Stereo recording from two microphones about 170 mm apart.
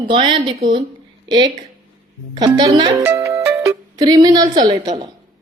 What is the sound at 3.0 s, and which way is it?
Music, 15° right (ahead or behind).